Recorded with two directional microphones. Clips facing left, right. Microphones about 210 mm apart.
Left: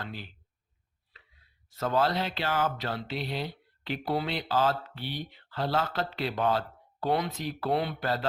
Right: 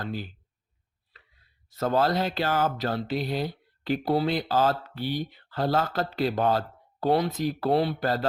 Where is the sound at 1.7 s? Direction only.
40° right (ahead or behind).